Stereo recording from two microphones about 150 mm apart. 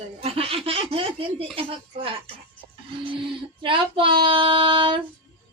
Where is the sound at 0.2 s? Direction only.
40° right (ahead or behind).